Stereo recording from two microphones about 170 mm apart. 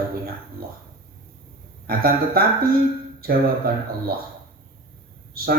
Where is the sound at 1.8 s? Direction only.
60° right (ahead or behind).